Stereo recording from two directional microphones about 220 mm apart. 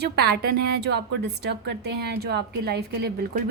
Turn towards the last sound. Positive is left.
turn(degrees=-45)  # may be behind; listen again after turning